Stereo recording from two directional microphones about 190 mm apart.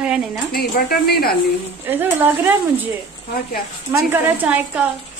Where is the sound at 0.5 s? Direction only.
50° left (ahead or behind).